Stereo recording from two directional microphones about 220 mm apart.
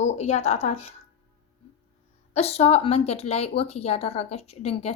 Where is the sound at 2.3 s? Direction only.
30° left (ahead or behind).